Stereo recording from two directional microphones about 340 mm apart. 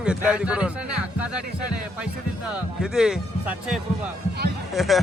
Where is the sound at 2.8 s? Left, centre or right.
Centre.